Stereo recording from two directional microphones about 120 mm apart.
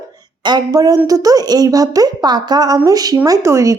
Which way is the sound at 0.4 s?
35° right (ahead or behind).